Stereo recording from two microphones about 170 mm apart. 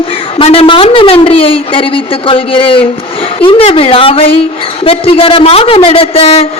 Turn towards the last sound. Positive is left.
turn(degrees=35)  # may be behind; listen again after turning